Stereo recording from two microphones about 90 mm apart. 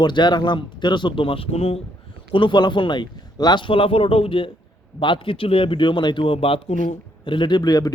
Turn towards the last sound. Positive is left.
turn(degrees=45)  # may be behind; listen again after turning